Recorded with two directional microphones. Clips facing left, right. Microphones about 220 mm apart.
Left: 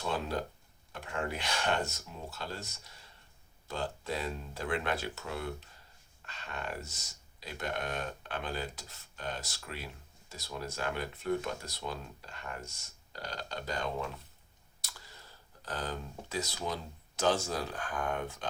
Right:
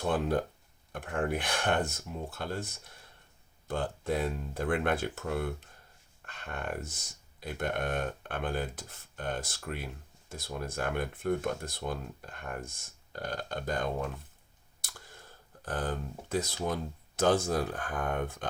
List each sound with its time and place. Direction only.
0.0 s speech: 50° right (ahead or behind)
14.8 s a sound: 50° right (ahead or behind)
16.6 s speech: 55° right (ahead or behind)